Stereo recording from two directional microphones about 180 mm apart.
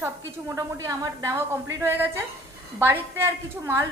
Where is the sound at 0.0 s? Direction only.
15° right (ahead or behind).